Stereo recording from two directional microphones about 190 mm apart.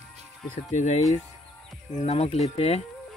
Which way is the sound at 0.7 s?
40° left (ahead or behind).